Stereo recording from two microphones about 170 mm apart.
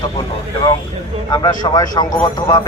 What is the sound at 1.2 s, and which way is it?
Speech, 25° left (ahead or behind).